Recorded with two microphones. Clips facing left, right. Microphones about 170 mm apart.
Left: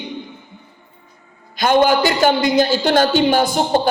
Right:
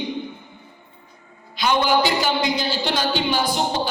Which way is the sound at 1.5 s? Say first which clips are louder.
Left 5 dB; 50° left (ahead or behind).